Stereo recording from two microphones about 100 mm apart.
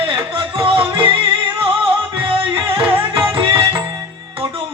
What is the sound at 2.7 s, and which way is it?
Music, 10° right (ahead or behind).